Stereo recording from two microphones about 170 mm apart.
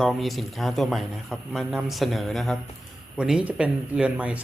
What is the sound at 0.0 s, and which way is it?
Speech, centre (ahead or behind).